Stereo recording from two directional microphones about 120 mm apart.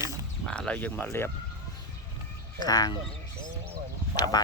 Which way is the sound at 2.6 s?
35° left (ahead or behind).